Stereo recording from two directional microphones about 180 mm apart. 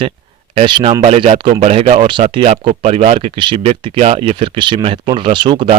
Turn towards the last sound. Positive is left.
turn(degrees=-25)  # may be behind; listen again after turning